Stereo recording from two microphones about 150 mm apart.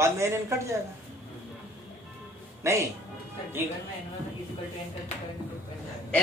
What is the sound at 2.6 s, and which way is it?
Speech, 20° right (ahead or behind).